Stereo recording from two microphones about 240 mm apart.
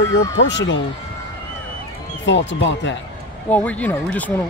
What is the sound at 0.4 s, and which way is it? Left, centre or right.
Speech, left.